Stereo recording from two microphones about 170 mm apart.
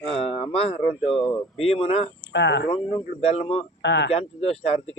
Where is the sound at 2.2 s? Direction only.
90° left.